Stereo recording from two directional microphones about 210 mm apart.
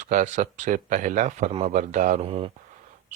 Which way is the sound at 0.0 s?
35° right (ahead or behind).